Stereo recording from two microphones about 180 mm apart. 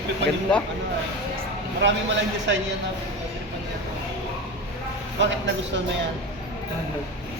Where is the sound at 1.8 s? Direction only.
80° right.